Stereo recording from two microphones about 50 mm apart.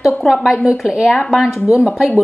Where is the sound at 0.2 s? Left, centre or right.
Centre.